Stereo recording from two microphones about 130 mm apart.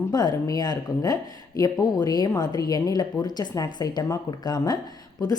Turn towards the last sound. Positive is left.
turn(degrees=30)  # may be behind; listen again after turning